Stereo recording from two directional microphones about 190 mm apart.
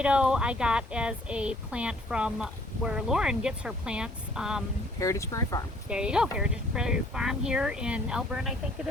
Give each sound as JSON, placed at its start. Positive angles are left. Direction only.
{"t": 0.0, "sound": "speech", "side_deg": -5}
{"t": 4.9, "sound": "speech", "side_deg": 15}
{"t": 5.9, "sound": "speech", "side_deg": -5}